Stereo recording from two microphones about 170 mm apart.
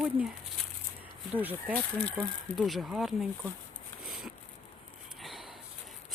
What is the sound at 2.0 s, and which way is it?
Speech, 10° left (ahead or behind).